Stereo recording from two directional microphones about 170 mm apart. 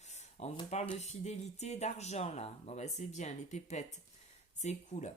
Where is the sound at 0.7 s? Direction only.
40° left (ahead or behind).